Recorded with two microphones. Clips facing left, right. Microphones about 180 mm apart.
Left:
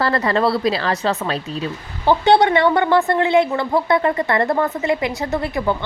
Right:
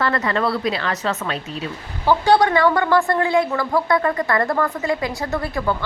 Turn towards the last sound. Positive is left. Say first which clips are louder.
# left 2 dB
turn(degrees=20)  # may be behind; listen again after turning